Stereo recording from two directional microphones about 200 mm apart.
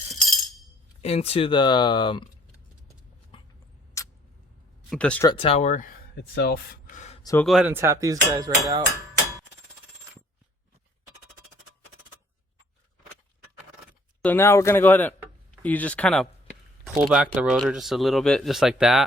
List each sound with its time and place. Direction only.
1.0 s speech: 30° left (ahead or behind)
3.3 s rodents: 25° left (ahead or behind)
4.0 s a sound: 15° left (ahead or behind)
4.9 s speech: 5° left (ahead or behind)
5.3 s speech: 30° left (ahead or behind)
6.1 s gasp: 55° left (ahead or behind); by 7.2 s 35° left (ahead or behind)
7.2 s speech: 15° left (ahead or behind)
7.4 s hammer: 5° right (ahead or behind)
14.2 s speech: 10° left (ahead or behind)
17.0 s speech: 5° right (ahead or behind)